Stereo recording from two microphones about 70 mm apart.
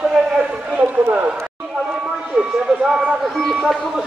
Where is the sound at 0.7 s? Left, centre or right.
Right.